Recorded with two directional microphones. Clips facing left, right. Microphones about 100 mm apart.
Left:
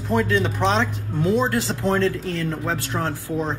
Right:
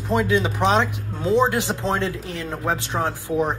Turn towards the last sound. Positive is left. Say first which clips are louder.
# right 3 dB
turn(degrees=-15)  # may be behind; listen again after turning